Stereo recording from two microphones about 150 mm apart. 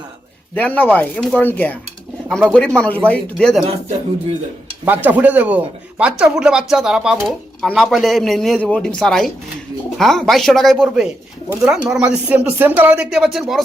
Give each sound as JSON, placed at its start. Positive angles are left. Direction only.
{"t": 0.5, "sound": "speech", "side_deg": 10}
{"t": 3.7, "sound": "speech", "side_deg": -45}
{"t": 4.9, "sound": "speech", "side_deg": -10}